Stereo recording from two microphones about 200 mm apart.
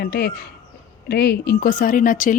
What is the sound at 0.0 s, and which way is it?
A woman's voice, 55° left (ahead or behind).